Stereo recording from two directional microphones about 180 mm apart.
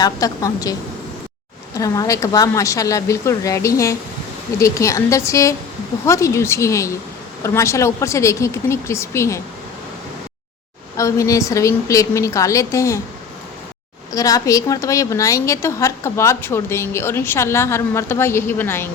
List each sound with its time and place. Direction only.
0.0 s a woman's voice: 20° left (ahead or behind)
10.9 s a woman's voice: 15° left (ahead or behind)
14.1 s a woman's voice: 20° left (ahead or behind)